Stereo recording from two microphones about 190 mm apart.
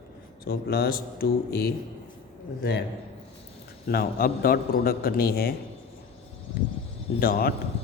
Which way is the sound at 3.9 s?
50° left (ahead or behind).